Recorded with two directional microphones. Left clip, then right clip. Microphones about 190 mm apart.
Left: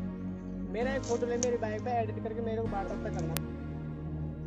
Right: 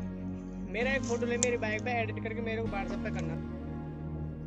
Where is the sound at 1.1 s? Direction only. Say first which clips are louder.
Even; 20° left (ahead or behind).